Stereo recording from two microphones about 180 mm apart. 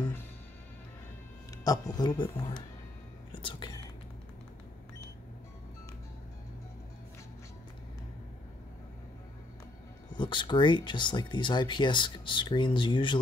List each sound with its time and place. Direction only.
1.6 s speech: 20° left (ahead or behind)
3.3 s whispering: 25° left (ahead or behind)
10.1 s speech: 25° left (ahead or behind)